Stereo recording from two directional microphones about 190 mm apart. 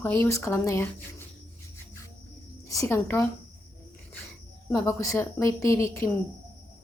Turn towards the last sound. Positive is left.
turn(degrees=15)  # may be behind; listen again after turning